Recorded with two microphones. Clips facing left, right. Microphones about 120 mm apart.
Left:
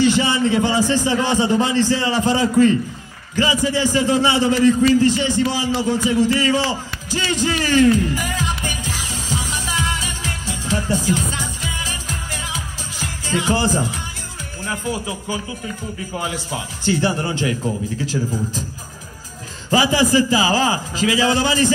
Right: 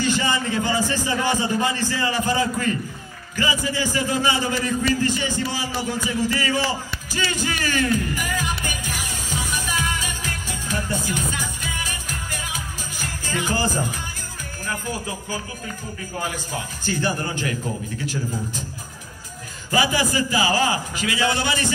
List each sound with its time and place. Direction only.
0.0 s a man's voice: 20° left (ahead or behind)
9.7 s music: 25° left (ahead or behind)
11.1 s music: 25° left (ahead or behind)
12.9 s music: 90° left
13.5 s speech: 20° left (ahead or behind)
16.4 s speech: 20° left (ahead or behind)
18.0 s a man's voice: 90° left
19.7 s a man's voice: 25° left (ahead or behind)